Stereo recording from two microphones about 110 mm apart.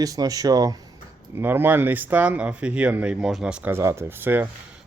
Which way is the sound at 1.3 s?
20° right (ahead or behind).